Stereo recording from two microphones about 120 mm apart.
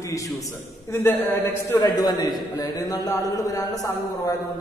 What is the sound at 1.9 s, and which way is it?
A man's voice, 35° left (ahead or behind).